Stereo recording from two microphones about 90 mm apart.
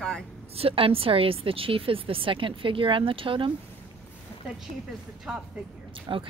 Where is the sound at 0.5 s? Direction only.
90° right.